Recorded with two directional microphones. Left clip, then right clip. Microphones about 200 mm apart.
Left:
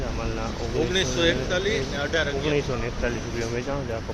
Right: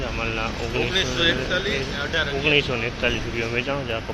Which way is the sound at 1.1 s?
55° left (ahead or behind).